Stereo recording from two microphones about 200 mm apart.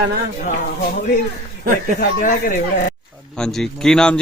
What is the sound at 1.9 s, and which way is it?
Speech, 40° left (ahead or behind).